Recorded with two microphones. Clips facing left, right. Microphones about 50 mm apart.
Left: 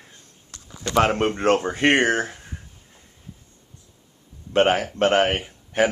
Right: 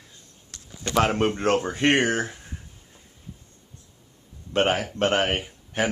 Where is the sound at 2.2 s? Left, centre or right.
Centre.